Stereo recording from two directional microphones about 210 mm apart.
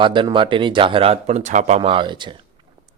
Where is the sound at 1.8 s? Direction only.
25° right (ahead or behind).